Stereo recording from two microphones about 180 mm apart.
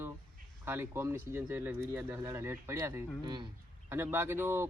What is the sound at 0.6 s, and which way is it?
A man's voice, 15° right (ahead or behind).